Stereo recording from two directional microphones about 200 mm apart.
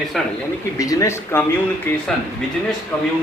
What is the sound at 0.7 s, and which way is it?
Speech, 15° left (ahead or behind).